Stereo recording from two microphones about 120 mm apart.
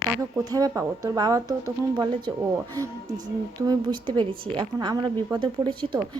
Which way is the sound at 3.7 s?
35° right (ahead or behind).